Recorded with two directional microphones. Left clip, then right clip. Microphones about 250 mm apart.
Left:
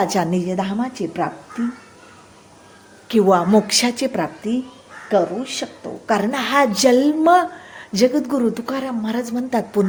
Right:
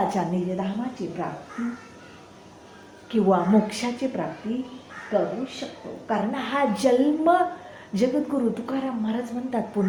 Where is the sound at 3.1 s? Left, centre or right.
Left.